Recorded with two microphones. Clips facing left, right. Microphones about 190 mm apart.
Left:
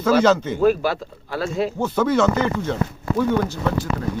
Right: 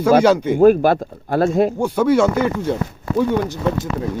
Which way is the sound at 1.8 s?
10° right (ahead or behind).